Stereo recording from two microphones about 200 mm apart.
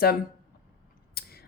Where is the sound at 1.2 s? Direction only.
50° left (ahead or behind).